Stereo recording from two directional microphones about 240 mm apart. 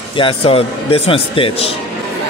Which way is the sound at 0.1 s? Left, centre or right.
Left.